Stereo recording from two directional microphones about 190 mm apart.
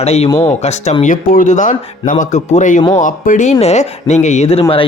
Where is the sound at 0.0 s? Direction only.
35° left (ahead or behind).